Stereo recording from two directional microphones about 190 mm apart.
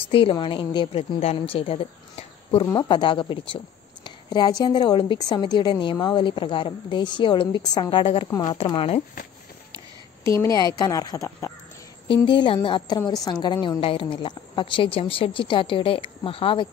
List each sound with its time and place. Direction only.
0.1 s a woman's voice: 30° left (ahead or behind)
2.6 s a woman's voice: 20° left (ahead or behind)
10.4 s a woman's voice: 20° left (ahead or behind)